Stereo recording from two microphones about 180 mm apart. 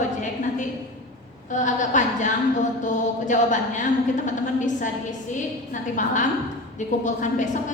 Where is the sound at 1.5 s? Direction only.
45° left (ahead or behind).